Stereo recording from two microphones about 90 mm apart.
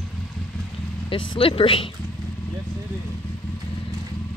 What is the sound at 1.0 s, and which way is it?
Speech, 80° left.